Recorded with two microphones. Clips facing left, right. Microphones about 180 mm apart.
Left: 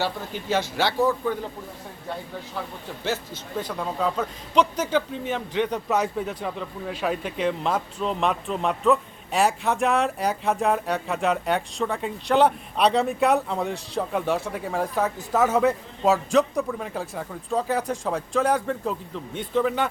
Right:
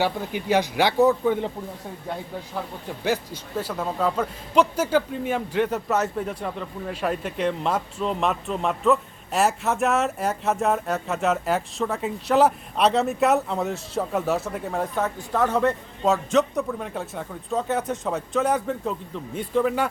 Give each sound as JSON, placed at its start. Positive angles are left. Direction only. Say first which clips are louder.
{"t": 0.0, "sound": "a man's voice", "louder": "right 3 dB", "side_deg": -15}
{"t": 3.6, "sound": "a man's voice", "louder": "right 1 dB", "side_deg": -5}